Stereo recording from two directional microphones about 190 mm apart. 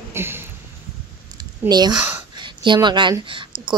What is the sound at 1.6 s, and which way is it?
Speech, 20° right (ahead or behind).